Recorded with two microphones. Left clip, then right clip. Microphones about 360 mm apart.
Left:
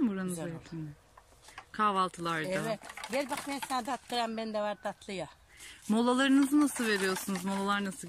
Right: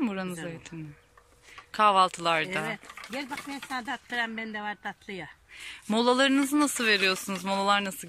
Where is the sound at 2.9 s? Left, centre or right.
Left.